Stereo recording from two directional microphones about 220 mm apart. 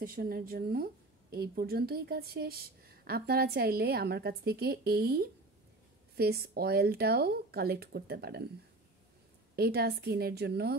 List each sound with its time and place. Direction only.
0.0 s a woman's voice: 40° right (ahead or behind)
9.6 s a woman's voice: 45° right (ahead or behind)